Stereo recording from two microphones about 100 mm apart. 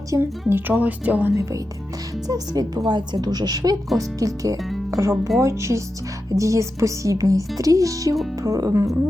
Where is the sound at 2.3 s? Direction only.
40° right (ahead or behind).